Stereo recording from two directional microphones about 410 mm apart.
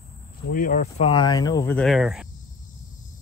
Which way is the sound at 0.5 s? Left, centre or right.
Centre.